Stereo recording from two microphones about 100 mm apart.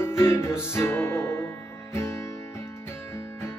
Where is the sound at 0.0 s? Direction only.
25° left (ahead or behind).